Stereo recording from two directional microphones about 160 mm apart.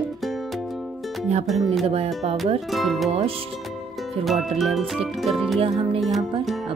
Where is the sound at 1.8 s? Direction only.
40° right (ahead or behind).